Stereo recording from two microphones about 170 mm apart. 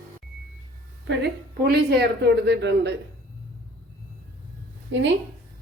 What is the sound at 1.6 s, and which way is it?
A woman's voice, 75° right (ahead or behind).